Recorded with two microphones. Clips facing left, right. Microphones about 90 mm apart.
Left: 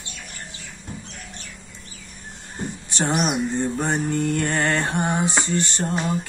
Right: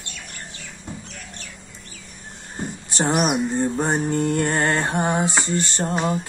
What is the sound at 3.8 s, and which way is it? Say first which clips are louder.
Mantra: right 1 dB; 30° right (ahead or behind).